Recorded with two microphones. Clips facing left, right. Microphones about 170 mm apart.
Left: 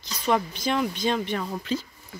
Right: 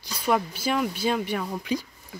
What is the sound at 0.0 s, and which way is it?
Speech, 10° right (ahead or behind).